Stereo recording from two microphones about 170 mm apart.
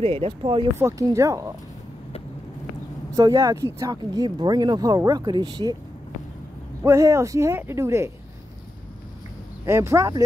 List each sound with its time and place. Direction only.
0.0 s speech: 35° right (ahead or behind)
0.7 s speech: 15° right (ahead or behind)
3.1 s speech: 20° right (ahead or behind)
6.8 s speech: 15° right (ahead or behind)
9.7 s speech: 15° right (ahead or behind)